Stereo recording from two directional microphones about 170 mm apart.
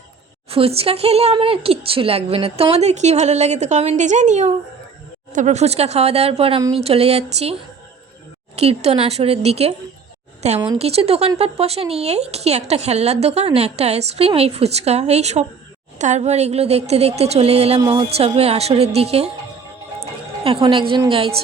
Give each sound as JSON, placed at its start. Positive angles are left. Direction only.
{"t": 0.5, "sound": "speech", "side_deg": -35}
{"t": 8.5, "sound": "speech", "side_deg": -40}
{"t": 20.0, "sound": "music", "side_deg": -35}
{"t": 20.9, "sound": "speech", "side_deg": -30}